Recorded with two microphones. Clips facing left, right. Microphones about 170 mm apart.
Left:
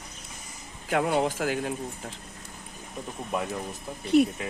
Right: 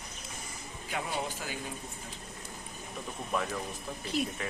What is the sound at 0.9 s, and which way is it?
Speech, 65° left (ahead or behind).